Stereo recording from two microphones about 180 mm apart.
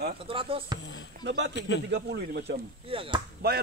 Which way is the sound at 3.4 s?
60° right (ahead or behind).